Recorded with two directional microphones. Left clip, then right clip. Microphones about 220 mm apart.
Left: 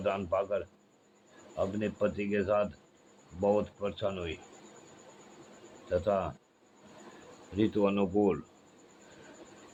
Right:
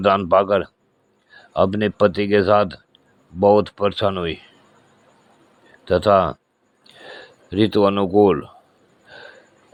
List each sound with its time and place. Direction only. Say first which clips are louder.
0.0 s speech: right 16 dB; 45° right (ahead or behind)
5.9 s speech: right 15 dB; 50° right (ahead or behind)
7.5 s speech: right 12 dB; 40° right (ahead or behind)